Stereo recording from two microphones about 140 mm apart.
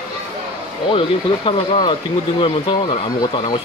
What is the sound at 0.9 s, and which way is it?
Speech, 40° left (ahead or behind).